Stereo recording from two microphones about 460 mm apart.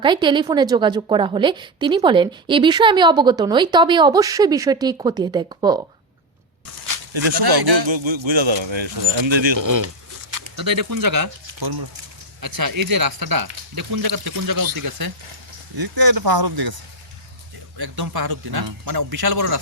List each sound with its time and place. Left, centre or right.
0.0 s a woman's voice: centre
7.3 s speech: right
9.6 s speech: right
17.7 s speech: right